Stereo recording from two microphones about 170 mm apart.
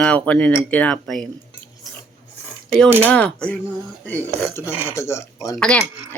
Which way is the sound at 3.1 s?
5° left (ahead or behind).